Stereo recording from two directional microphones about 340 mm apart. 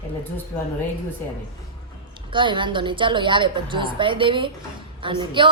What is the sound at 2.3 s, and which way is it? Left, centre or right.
A woman's voice, centre.